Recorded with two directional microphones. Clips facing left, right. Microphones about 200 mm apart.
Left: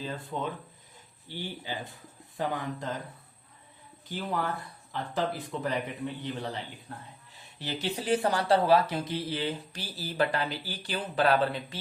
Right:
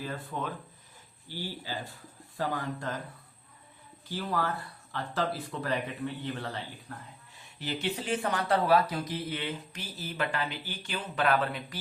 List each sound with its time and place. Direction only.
1.3 s speech: 20° left (ahead or behind)
4.1 s speech: 20° left (ahead or behind)
7.7 s speech: 35° left (ahead or behind)